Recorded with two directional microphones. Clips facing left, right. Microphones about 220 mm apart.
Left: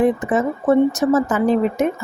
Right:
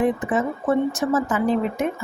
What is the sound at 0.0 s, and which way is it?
Speech, 40° left (ahead or behind).